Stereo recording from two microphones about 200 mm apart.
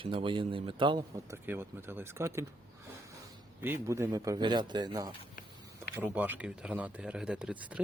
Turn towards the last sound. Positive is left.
turn(degrees=-5)  # may be behind; listen again after turning